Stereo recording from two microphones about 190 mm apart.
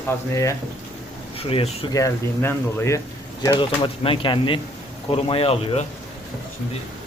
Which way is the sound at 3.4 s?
25° left (ahead or behind).